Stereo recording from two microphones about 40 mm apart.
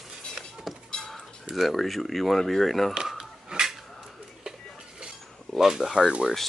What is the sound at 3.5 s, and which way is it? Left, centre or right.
Dishes, right.